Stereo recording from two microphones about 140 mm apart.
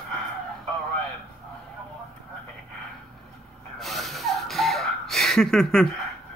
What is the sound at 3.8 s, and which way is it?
Snort, centre (ahead or behind).